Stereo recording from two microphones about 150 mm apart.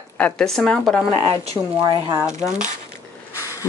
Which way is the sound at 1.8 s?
30° right (ahead or behind).